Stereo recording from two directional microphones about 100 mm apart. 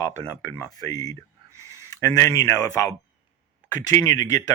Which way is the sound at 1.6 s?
30° left (ahead or behind).